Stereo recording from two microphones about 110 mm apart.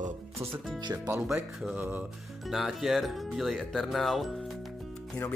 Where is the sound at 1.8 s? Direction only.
15° right (ahead or behind).